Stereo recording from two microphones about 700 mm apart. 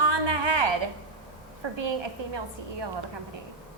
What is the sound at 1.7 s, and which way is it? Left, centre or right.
A woman's voice, right.